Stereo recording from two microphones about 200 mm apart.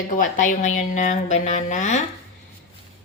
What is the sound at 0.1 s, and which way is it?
Speech, 40° left (ahead or behind).